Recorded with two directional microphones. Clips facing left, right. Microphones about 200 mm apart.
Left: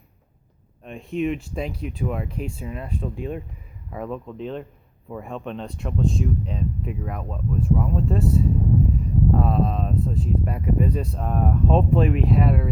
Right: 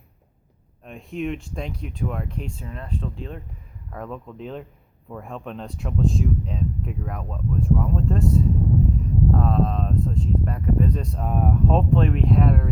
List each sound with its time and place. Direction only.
0.9 s speech: centre (ahead or behind)